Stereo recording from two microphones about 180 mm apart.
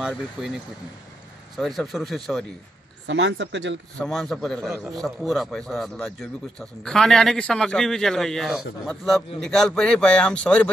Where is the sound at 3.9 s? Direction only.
Centre (ahead or behind).